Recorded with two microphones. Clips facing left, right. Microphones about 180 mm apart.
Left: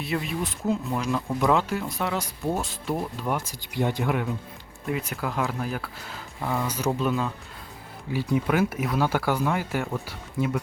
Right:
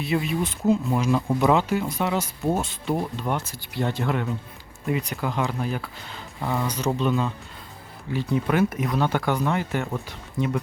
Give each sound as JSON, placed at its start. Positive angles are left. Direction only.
{"t": 0.0, "sound": "speech", "side_deg": 0}